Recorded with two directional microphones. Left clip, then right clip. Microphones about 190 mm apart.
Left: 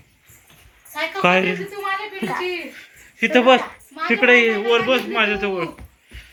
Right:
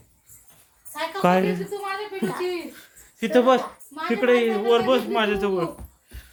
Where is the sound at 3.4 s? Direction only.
5° left (ahead or behind).